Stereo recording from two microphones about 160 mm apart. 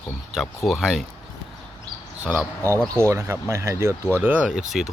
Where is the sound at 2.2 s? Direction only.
10° right (ahead or behind).